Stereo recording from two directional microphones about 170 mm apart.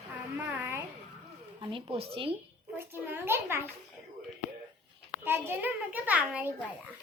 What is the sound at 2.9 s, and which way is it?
Speech, 10° right (ahead or behind).